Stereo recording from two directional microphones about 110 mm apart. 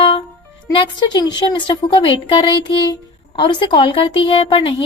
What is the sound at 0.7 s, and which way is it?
A woman's voice, 45° left (ahead or behind).